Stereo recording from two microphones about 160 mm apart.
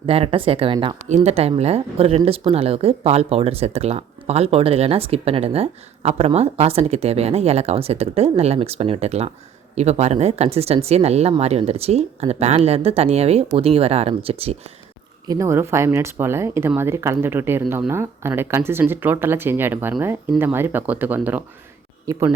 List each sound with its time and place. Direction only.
0.0 s speech: 35° right (ahead or behind)
1.0 s speech: 45° right (ahead or behind)
15.3 s speech: 20° right (ahead or behind)
22.0 s speech: 20° right (ahead or behind)